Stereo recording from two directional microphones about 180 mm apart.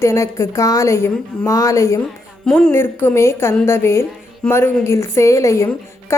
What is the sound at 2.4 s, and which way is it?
A woman's voice, 5° left (ahead or behind).